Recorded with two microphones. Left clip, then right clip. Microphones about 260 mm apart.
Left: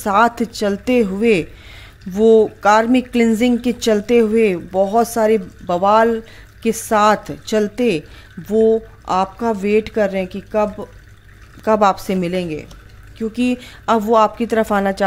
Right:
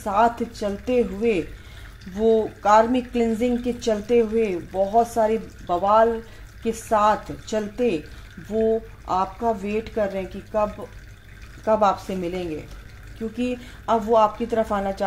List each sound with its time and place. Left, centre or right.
0.0 s speech: left